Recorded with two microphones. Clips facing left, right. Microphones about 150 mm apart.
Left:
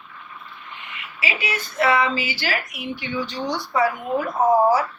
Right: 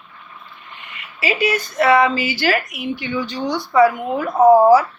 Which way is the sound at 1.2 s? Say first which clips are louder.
Right 8 dB; 40° right (ahead or behind).